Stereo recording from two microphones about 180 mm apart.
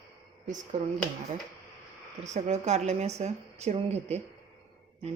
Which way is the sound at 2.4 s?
40° right (ahead or behind).